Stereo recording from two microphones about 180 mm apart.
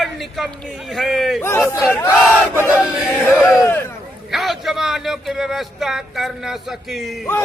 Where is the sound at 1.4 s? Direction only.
15° left (ahead or behind).